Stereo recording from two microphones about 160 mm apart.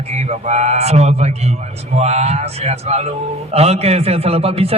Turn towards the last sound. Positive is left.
turn(degrees=-40)  # may be behind; listen again after turning